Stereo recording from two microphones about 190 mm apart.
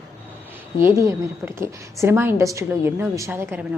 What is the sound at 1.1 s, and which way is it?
A woman's voice, 15° right (ahead or behind).